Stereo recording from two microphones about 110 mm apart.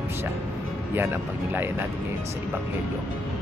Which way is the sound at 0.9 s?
20° right (ahead or behind).